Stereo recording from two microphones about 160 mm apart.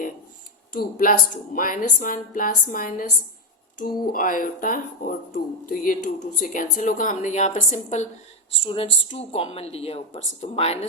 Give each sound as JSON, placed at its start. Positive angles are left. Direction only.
{"t": 0.7, "sound": "speech", "side_deg": 60}